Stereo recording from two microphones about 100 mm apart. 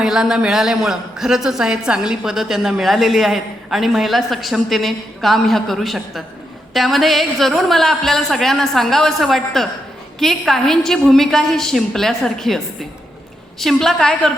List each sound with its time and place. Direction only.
0.0 s a man's voice: 5° right (ahead or behind)